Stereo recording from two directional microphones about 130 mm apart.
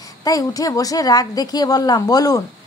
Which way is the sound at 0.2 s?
25° left (ahead or behind).